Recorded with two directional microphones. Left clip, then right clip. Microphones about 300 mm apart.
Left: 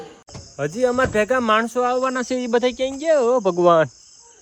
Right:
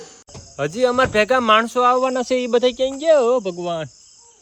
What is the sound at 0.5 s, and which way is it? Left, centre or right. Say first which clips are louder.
A man's voice: right 2 dB; centre.